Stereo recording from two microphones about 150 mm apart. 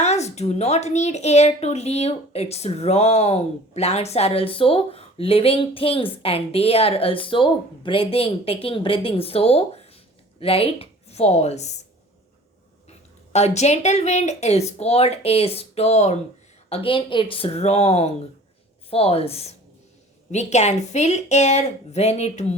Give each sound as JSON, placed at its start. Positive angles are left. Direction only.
{"t": 0.0, "sound": "speech", "side_deg": 45}
{"t": 13.3, "sound": "speech", "side_deg": 50}